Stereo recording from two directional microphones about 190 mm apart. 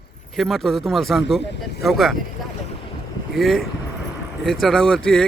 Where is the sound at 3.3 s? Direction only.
Centre (ahead or behind).